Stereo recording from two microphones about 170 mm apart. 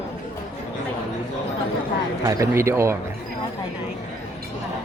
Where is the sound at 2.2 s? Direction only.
20° right (ahead or behind).